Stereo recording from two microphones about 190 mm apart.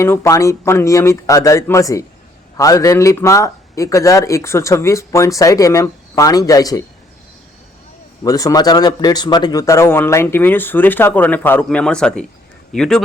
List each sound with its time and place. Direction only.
0.0 s speech: 15° left (ahead or behind)
8.2 s speech: 20° left (ahead or behind)